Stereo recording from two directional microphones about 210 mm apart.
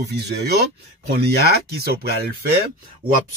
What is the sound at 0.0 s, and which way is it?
Speech, 55° right (ahead or behind).